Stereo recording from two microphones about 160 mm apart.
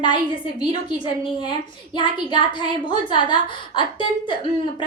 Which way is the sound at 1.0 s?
30° left (ahead or behind).